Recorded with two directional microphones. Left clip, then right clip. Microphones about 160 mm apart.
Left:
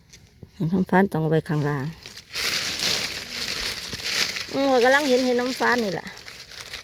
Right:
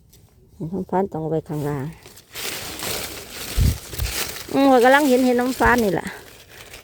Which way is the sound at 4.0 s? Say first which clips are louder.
Left 4 dB; 50° right (ahead or behind).